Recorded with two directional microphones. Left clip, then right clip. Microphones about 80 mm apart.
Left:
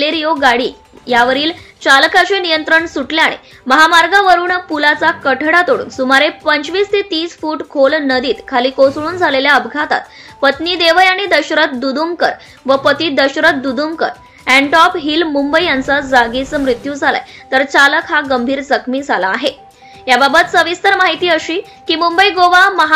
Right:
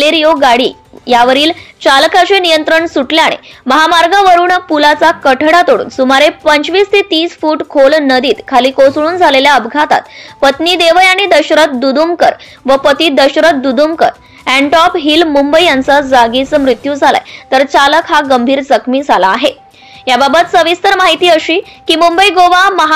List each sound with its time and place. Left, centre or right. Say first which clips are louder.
0.0 s a woman's voice: right 5 dB; right